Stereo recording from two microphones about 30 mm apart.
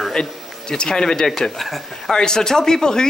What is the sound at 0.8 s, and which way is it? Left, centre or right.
Speech, left.